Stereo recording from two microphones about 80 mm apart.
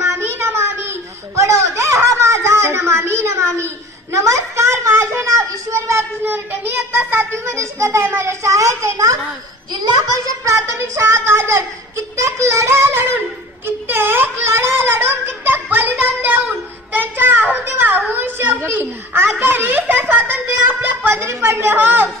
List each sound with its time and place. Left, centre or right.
0.0 s a sound: right
6.3 s a child's voice: right
9.7 s a child's voice: right
10.4 s a child's voice: right